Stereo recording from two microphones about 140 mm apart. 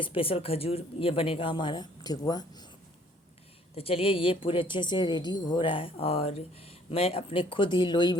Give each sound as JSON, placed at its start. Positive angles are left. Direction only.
{"t": 0.0, "sound": "a woman's voice", "side_deg": 40}
{"t": 3.8, "sound": "a woman's voice", "side_deg": 45}